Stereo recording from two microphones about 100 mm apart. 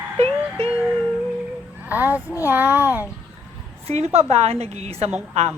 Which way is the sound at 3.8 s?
85° right.